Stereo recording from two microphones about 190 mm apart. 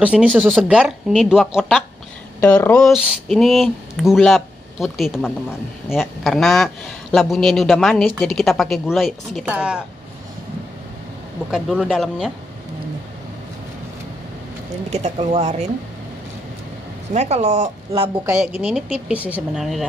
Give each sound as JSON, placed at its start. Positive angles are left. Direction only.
{"t": 0.0, "sound": "speech", "side_deg": -5}
{"t": 11.5, "sound": "speech", "side_deg": -5}
{"t": 14.9, "sound": "speech", "side_deg": -35}
{"t": 17.1, "sound": "speech", "side_deg": -35}
{"t": 18.4, "sound": "speech", "side_deg": -5}